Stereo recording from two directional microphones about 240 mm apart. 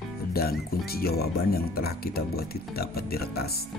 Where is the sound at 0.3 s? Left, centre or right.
Left.